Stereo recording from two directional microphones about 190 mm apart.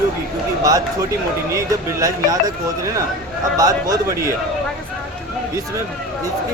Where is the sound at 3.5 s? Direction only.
15° right (ahead or behind).